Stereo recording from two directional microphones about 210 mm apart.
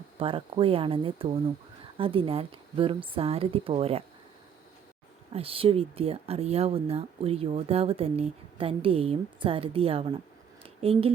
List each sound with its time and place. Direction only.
0.2 s speech: 25° right (ahead or behind)
5.3 s speech: 25° right (ahead or behind)
10.6 s a sound: 25° right (ahead or behind)